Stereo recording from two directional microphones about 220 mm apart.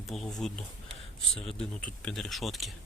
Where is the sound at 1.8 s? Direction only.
5° left (ahead or behind).